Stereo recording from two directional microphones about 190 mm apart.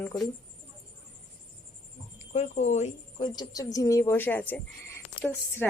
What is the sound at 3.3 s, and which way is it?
A woman's voice, 20° left (ahead or behind).